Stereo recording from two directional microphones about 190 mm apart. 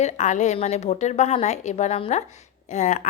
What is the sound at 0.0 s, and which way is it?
A woman's voice, 40° left (ahead or behind).